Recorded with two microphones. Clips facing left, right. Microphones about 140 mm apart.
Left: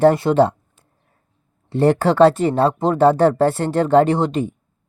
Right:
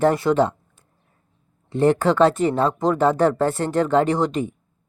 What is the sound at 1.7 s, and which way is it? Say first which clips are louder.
Speech: left 2 dB; 30° left (ahead or behind).